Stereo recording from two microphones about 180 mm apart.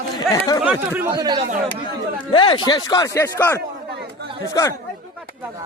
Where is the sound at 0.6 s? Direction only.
10° right (ahead or behind).